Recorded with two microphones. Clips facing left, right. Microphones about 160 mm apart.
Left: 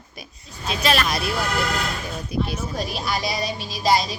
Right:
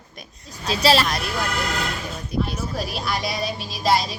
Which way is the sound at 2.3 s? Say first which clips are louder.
Even; 10° left (ahead or behind).